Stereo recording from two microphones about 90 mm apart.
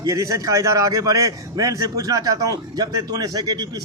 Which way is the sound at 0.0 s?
35° right (ahead or behind).